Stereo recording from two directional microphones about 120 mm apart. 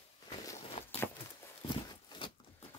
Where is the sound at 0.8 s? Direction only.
65° left (ahead or behind).